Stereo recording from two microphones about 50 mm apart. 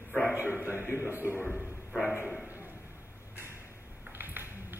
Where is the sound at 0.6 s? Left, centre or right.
Left.